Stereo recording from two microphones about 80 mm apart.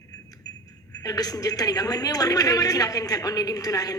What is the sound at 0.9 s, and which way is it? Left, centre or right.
A woman's voice, left.